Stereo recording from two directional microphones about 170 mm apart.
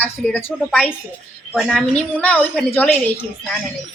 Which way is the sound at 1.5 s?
5° right (ahead or behind).